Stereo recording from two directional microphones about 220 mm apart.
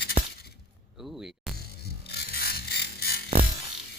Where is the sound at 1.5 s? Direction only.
45° left (ahead or behind).